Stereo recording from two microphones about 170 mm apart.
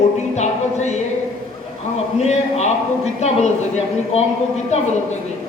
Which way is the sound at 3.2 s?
40° left (ahead or behind).